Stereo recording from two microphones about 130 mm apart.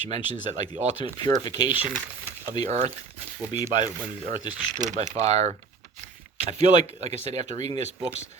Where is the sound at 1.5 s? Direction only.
30° left (ahead or behind).